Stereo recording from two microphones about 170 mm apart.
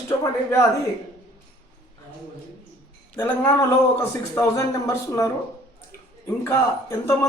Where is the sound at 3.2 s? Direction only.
15° left (ahead or behind).